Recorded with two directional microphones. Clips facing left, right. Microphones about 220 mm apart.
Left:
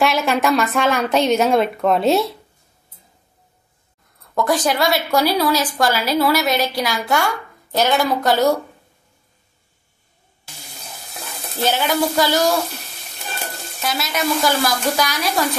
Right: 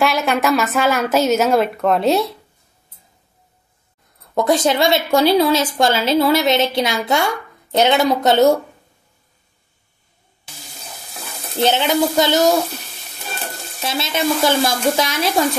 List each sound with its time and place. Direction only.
0.0 s speech: centre (ahead or behind)
4.4 s speech: 20° right (ahead or behind)
11.6 s speech: 25° right (ahead or behind)
13.7 s speech: 25° right (ahead or behind)